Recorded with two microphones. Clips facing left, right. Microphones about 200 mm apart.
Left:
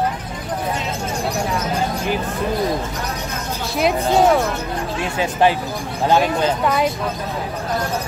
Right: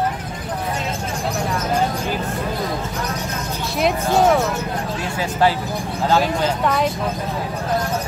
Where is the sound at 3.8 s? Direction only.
Centre (ahead or behind).